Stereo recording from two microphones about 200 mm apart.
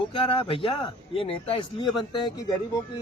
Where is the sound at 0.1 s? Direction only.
25° left (ahead or behind).